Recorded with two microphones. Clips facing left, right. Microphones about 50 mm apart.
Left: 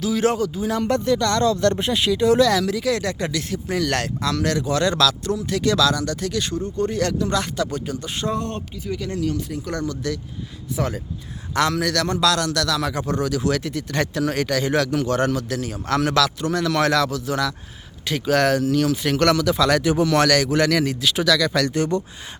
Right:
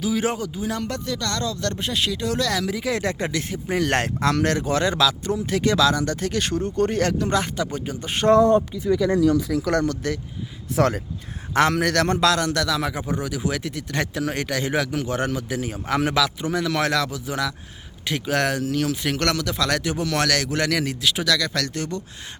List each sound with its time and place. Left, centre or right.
0.0 s speech: centre
0.9 s speech: left
1.9 s speech: centre
2.6 s speech: centre
4.9 s speech: centre
9.6 s speech: right
10.0 s speech: right
10.8 s speech: right
11.5 s a man's voice: right; by 22.0 s centre